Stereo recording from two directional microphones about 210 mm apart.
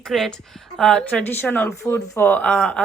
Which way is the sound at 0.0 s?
Centre (ahead or behind).